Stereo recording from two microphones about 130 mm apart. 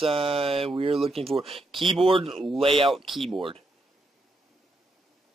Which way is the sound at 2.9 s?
Centre (ahead or behind).